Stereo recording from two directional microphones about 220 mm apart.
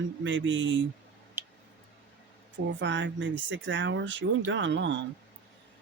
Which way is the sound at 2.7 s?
55° right (ahead or behind).